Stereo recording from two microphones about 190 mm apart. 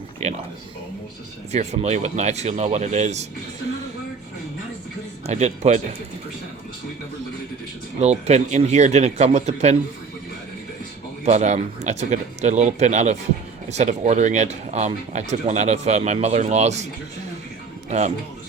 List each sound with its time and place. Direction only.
0.2 s speech: 35° right (ahead or behind)
1.5 s speech: 35° right (ahead or behind)
5.3 s speech: 35° right (ahead or behind)
8.0 s speech: 35° right (ahead or behind)
11.3 s speech: 35° right (ahead or behind)